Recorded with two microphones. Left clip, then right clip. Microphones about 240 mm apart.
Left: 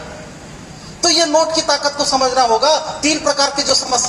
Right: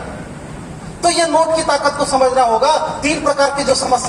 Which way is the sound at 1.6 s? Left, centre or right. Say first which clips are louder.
Right 1 dB; left.